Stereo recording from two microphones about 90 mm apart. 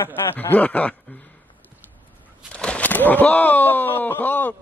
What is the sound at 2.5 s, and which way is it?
Speech, 10° left (ahead or behind).